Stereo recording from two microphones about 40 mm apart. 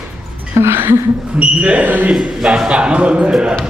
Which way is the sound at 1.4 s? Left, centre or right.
Right.